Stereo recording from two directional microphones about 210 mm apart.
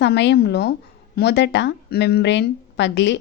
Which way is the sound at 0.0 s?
55° left (ahead or behind).